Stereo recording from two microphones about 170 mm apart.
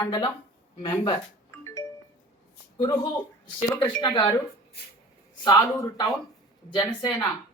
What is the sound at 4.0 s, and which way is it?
Speech, 25° left (ahead or behind).